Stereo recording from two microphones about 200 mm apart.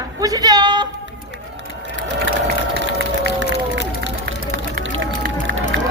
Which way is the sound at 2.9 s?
60° right (ahead or behind).